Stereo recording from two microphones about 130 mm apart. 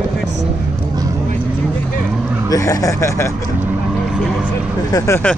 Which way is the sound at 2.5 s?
25° left (ahead or behind).